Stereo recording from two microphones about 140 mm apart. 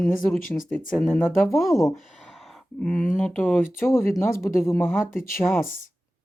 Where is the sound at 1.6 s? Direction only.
Centre (ahead or behind).